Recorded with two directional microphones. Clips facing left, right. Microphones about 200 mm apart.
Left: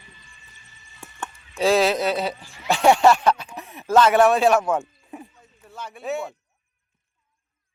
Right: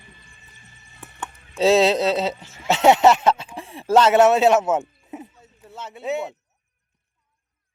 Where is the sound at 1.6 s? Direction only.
25° right (ahead or behind).